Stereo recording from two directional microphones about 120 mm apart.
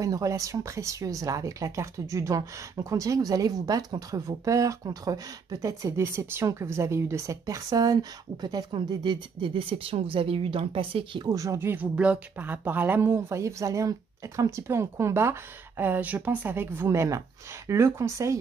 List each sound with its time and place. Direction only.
0.0 s speech: 30° right (ahead or behind); by 11.2 s 50° right (ahead or behind)
11.2 s speech: 25° right (ahead or behind)